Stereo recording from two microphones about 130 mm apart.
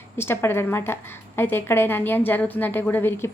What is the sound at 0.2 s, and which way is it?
A woman's voice, 20° left (ahead or behind).